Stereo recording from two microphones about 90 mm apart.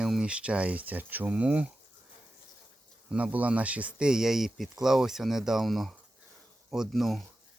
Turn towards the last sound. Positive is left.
turn(degrees=0)  # may be behind; listen again after turning